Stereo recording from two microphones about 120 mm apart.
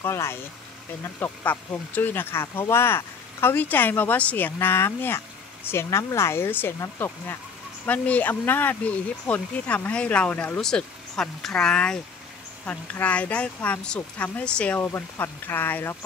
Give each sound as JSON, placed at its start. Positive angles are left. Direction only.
{"t": 0.0, "sound": "speech", "side_deg": 20}